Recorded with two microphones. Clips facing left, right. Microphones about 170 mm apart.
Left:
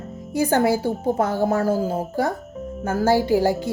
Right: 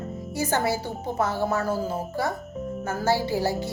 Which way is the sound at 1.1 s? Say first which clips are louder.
Left 4 dB; 50° left (ahead or behind).